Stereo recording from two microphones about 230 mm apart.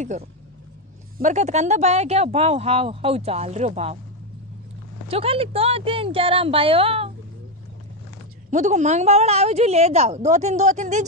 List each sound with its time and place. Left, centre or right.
1.1 s speech: right
5.0 s speech: right
8.5 s speech: right